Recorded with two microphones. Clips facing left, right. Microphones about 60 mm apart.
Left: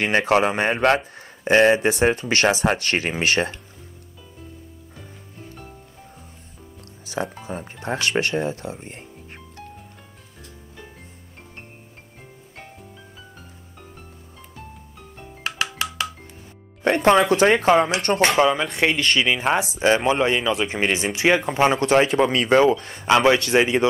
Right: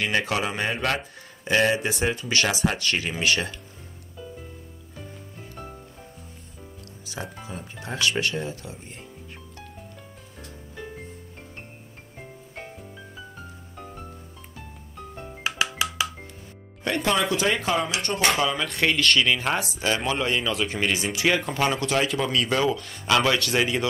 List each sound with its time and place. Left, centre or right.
0.0 s speech: left
7.4 s speech: left
15.4 s music: centre
16.8 s speech: left
18.6 s speech: centre
20.8 s speech: left